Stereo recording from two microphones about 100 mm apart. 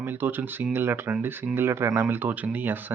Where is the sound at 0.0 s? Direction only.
20° right (ahead or behind).